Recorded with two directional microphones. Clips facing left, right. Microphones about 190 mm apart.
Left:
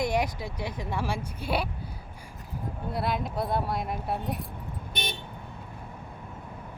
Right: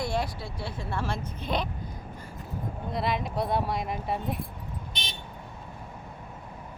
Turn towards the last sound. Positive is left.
turn(degrees=55)  # may be behind; listen again after turning